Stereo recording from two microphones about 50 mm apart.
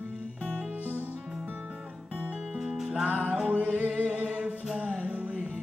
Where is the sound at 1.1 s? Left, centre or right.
Centre.